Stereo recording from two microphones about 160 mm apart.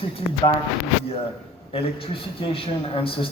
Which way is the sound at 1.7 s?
35° left (ahead or behind).